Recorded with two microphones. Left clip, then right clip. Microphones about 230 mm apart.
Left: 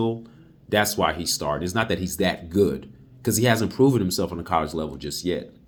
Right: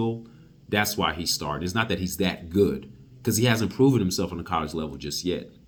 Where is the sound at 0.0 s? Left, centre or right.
Centre.